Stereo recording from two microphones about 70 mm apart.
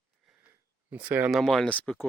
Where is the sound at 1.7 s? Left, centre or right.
Centre.